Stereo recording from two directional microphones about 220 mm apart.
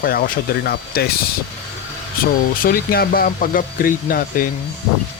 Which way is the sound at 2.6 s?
40° left (ahead or behind).